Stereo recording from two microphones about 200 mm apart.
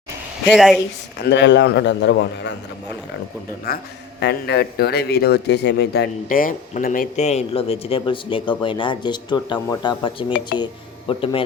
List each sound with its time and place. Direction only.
0.5 s speech: centre (ahead or behind)
1.2 s speech: 60° left (ahead or behind)
3.7 s speech: 50° left (ahead or behind)
6.2 s speech: 40° left (ahead or behind); by 11.4 s 25° left (ahead or behind)